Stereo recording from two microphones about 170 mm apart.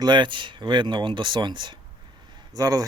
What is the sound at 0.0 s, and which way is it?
Speech, 25° right (ahead or behind).